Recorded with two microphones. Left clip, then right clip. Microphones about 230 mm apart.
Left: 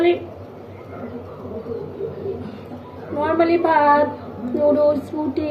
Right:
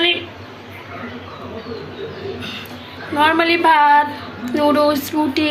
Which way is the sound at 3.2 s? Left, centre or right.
Right.